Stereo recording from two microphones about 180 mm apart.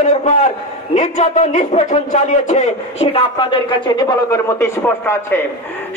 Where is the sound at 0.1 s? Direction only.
40° left (ahead or behind).